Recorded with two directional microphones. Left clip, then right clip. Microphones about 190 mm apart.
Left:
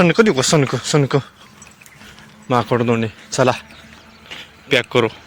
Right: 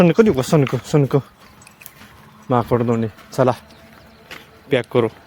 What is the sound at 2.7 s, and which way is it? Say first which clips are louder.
Speech: left 1 dB; 5° right (ahead or behind).